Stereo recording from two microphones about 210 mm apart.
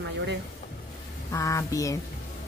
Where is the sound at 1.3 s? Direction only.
15° left (ahead or behind).